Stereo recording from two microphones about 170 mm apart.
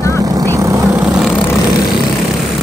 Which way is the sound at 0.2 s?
20° right (ahead or behind).